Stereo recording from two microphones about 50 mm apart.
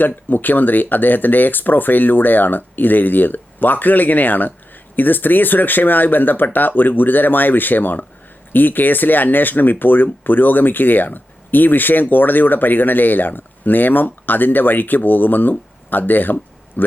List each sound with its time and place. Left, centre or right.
0.0 s speech: left